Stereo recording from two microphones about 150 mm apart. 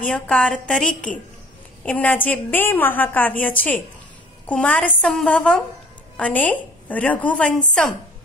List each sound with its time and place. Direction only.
0.1 s a woman's voice: 5° left (ahead or behind)